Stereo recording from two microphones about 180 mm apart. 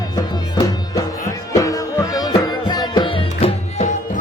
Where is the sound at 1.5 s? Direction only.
20° left (ahead or behind); by 4.2 s 35° left (ahead or behind).